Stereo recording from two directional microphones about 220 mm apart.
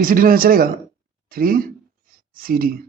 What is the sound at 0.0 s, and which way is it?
A man's voice, 40° right (ahead or behind).